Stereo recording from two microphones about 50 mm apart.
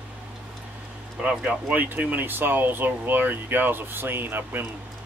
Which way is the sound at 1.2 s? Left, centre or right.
Right.